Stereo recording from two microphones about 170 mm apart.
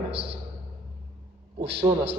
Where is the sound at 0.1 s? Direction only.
75° right (ahead or behind).